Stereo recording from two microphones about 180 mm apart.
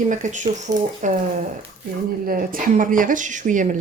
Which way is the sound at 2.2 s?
50° right (ahead or behind).